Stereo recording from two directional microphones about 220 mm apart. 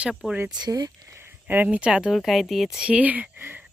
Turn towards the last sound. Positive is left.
turn(degrees=-10)  # may be behind; listen again after turning